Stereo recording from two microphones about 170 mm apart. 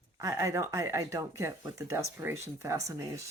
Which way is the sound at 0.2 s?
15° right (ahead or behind).